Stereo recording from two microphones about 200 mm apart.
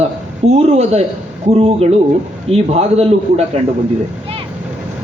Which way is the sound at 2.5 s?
30° right (ahead or behind).